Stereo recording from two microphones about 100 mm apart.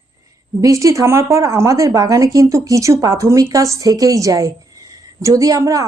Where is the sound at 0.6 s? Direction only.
35° right (ahead or behind).